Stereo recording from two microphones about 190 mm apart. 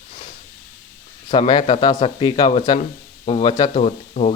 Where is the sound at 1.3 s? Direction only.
25° left (ahead or behind).